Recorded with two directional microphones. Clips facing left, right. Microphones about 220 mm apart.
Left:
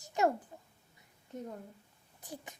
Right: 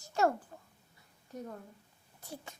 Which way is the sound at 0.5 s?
15° left (ahead or behind).